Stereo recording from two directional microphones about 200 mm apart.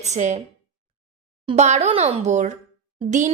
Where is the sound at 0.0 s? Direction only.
35° right (ahead or behind).